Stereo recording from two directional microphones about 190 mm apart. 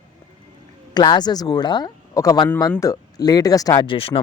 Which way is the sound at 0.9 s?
20° left (ahead or behind).